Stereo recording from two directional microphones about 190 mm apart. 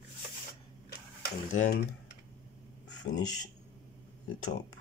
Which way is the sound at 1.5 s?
45° left (ahead or behind).